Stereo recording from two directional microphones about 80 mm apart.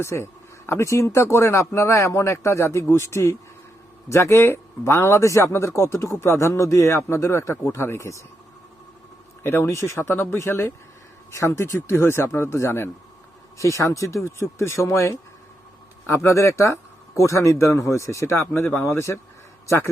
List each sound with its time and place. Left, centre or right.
0.0 s speech: left
9.4 s a man's voice: left